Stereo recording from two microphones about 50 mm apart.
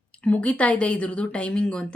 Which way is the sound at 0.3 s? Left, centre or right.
Left.